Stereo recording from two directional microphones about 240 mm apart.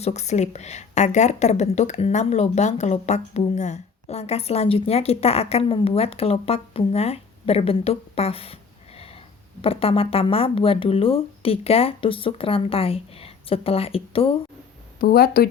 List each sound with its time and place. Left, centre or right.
0.0 s a woman's voice: left
9.6 s a woman's voice: left
15.0 s speech: left